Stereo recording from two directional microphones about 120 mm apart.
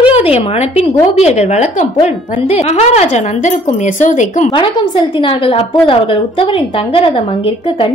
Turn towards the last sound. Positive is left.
turn(degrees=50)  # may be behind; listen again after turning